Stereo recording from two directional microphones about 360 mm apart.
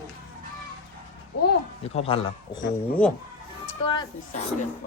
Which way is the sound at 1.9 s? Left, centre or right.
Centre.